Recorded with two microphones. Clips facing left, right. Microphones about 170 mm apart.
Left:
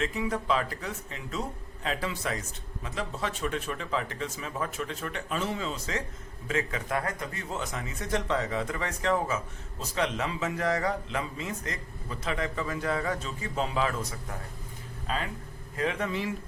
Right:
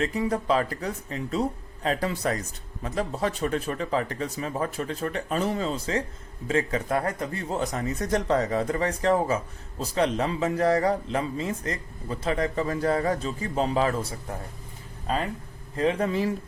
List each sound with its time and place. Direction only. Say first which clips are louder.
0.0 s a man's voice: right 4 dB; 35° right (ahead or behind)
15.7 s a man's voice: right 6 dB; 30° right (ahead or behind)